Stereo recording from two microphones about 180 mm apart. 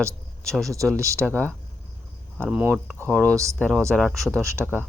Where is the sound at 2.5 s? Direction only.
5° right (ahead or behind).